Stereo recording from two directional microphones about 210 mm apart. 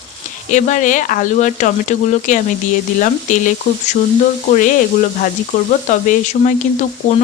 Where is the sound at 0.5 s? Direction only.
35° left (ahead or behind).